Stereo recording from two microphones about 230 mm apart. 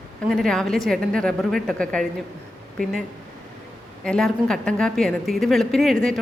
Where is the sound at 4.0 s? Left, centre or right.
Centre.